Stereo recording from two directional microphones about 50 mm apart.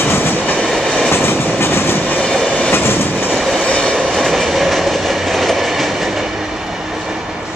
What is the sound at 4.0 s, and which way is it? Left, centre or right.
Train, centre.